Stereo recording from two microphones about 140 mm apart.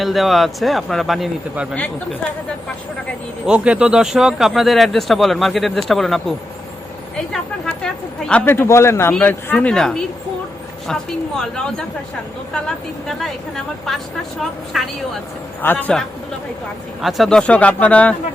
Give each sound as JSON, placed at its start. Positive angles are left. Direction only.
{"t": 0.0, "sound": "speech", "side_deg": 0}
{"t": 3.4, "sound": "speech", "side_deg": -10}
{"t": 7.6, "sound": "speech", "side_deg": 5}
{"t": 14.7, "sound": "speech", "side_deg": 0}
{"t": 15.6, "sound": "speech", "side_deg": 10}